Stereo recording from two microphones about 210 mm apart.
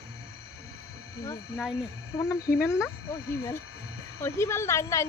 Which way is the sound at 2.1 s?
15° left (ahead or behind).